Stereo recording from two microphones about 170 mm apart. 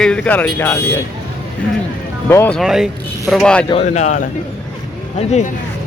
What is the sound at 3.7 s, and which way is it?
Speech, 40° left (ahead or behind).